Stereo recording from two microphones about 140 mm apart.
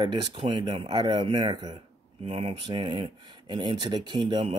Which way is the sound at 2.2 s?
45° right (ahead or behind).